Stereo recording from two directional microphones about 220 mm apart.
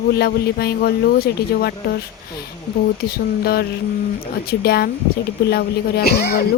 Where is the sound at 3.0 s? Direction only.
45° left (ahead or behind).